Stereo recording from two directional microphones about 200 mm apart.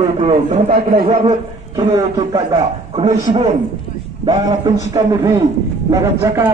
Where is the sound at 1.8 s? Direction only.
20° right (ahead or behind).